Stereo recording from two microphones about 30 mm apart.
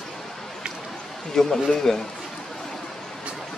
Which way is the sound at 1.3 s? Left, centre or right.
Centre.